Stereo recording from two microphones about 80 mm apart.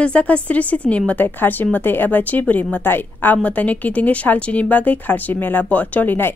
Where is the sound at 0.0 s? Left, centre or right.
Centre.